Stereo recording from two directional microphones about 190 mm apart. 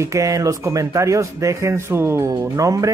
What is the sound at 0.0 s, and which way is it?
Speech, 15° right (ahead or behind).